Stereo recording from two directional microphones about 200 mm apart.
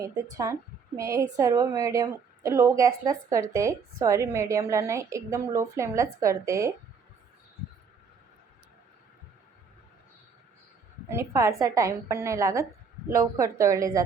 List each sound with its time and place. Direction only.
0.0 s a woman's voice: 15° right (ahead or behind)
11.1 s a woman's voice: 15° right (ahead or behind)